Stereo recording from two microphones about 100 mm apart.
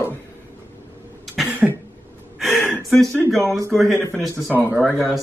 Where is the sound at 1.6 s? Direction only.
10° right (ahead or behind).